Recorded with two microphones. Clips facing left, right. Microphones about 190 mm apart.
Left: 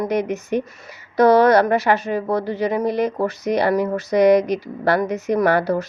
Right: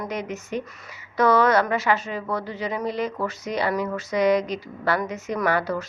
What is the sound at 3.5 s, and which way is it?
Speech, 70° left (ahead or behind).